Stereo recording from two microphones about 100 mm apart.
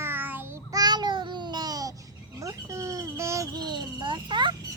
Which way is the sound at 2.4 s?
30° right (ahead or behind).